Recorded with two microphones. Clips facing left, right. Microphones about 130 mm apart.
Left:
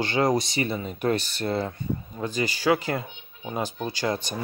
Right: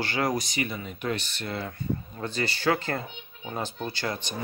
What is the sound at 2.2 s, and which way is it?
Speech, 15° left (ahead or behind).